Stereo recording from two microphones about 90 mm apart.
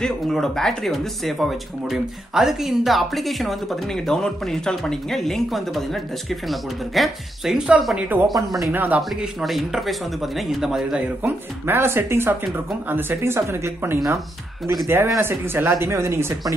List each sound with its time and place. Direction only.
0.0 s speech: 5° left (ahead or behind)
8.4 s speech: 40° right (ahead or behind)
8.7 s speech: 20° right (ahead or behind)
9.2 s speech: 5° right (ahead or behind)
11.2 s speech: 25° right (ahead or behind)